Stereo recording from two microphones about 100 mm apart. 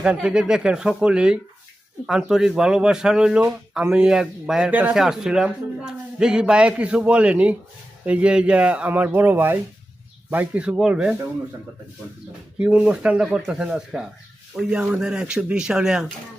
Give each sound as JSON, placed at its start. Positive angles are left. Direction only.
{"t": 0.0, "sound": "speech", "side_deg": -10}
{"t": 4.7, "sound": "speech", "side_deg": -15}
{"t": 4.9, "sound": "speech", "side_deg": -5}
{"t": 12.5, "sound": "speech", "side_deg": -10}